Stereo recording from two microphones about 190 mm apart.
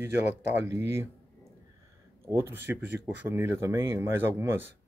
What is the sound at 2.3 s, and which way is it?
Speech, 10° right (ahead or behind).